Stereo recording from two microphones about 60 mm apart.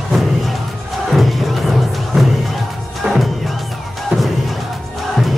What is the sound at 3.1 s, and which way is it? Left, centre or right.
Music, centre.